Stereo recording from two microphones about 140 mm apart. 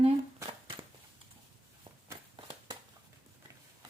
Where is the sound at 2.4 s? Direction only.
35° right (ahead or behind).